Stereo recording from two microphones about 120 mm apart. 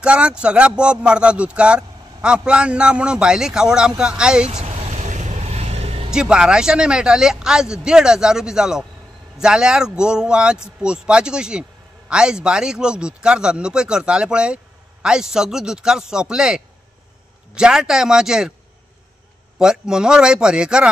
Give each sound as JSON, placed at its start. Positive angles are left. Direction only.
{"t": 0.0, "sound": "speech", "side_deg": -10}
{"t": 4.6, "sound": "vehicle", "side_deg": -65}
{"t": 6.1, "sound": "a man's voice", "side_deg": -5}
{"t": 19.6, "sound": "speech", "side_deg": -5}